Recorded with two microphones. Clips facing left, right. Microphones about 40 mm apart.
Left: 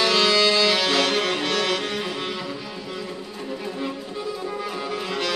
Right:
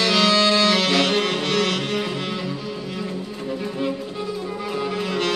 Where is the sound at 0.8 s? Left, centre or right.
Right.